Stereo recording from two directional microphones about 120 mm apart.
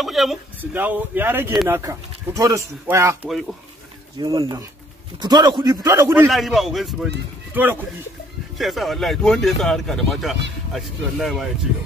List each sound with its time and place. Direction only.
0.0 s speech: centre (ahead or behind)
0.6 s a man's voice: 15° right (ahead or behind)
6.2 s speech: centre (ahead or behind)
7.5 s speech: 15° right (ahead or behind)
8.5 s speech: centre (ahead or behind)